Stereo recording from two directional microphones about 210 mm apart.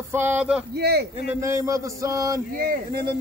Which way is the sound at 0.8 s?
50° right (ahead or behind).